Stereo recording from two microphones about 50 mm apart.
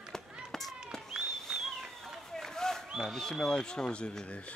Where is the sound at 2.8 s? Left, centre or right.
Centre.